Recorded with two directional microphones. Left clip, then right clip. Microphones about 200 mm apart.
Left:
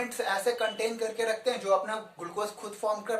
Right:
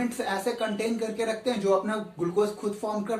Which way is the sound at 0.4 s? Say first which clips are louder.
Even; 25° left (ahead or behind).